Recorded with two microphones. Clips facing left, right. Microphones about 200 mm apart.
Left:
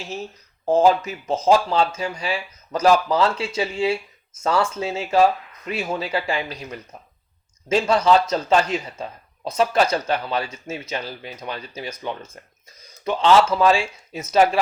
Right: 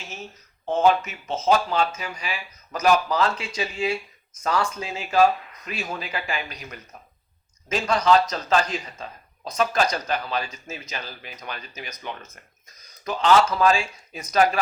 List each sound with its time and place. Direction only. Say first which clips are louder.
0.6 s a man's voice: left 3 dB; 35° left (ahead or behind)